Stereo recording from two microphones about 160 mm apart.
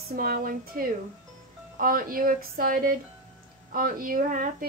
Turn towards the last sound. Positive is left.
turn(degrees=-60)  # may be behind; listen again after turning